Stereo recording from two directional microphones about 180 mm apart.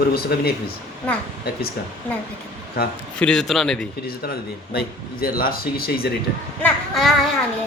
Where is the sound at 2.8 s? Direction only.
55° left (ahead or behind).